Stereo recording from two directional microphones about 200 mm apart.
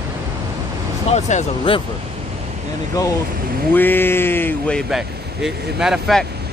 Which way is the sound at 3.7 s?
10° left (ahead or behind).